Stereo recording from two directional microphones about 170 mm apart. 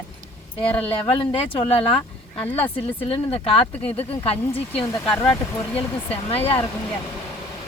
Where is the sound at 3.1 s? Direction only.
35° left (ahead or behind).